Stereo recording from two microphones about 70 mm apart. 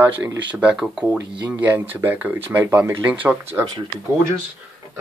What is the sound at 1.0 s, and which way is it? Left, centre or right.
Speech, right.